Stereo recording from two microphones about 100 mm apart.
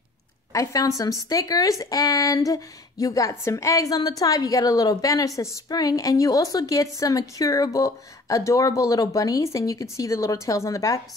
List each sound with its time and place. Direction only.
0.5 s speech: 35° left (ahead or behind)